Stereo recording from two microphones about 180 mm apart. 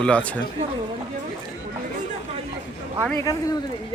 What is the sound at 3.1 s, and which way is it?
Speech, 20° left (ahead or behind).